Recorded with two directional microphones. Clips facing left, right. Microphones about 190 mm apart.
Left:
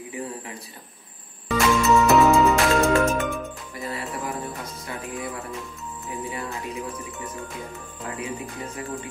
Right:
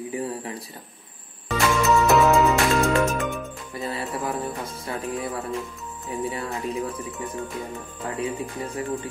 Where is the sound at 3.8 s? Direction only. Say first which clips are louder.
Right 2 dB; 25° right (ahead or behind).